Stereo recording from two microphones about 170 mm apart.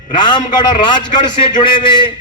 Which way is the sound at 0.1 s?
25° left (ahead or behind).